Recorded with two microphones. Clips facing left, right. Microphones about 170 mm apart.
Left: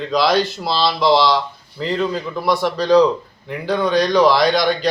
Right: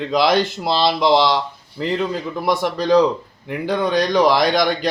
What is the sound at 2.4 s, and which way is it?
Speech, 15° right (ahead or behind).